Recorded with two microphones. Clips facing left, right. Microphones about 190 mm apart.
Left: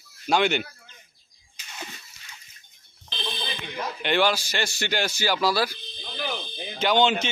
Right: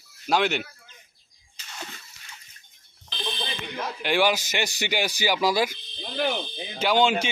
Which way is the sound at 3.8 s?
5° right (ahead or behind).